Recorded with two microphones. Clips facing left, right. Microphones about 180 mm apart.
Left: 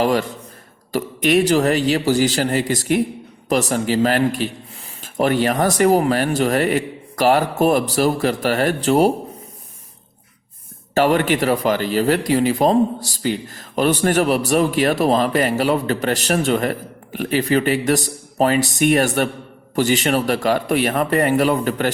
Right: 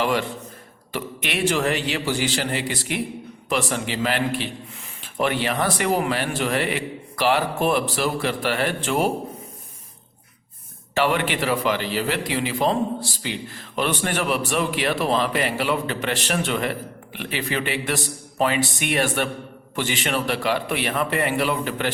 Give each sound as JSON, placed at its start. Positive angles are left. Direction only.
{"t": 0.0, "sound": "speech", "side_deg": 40}
{"t": 10.9, "sound": "a man's voice", "side_deg": 40}